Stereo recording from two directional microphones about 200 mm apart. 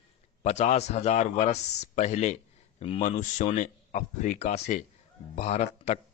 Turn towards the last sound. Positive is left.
turn(degrees=35)  # may be behind; listen again after turning